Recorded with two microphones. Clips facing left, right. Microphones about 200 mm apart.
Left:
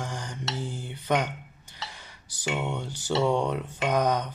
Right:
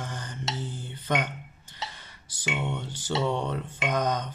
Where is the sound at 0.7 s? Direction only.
15° left (ahead or behind).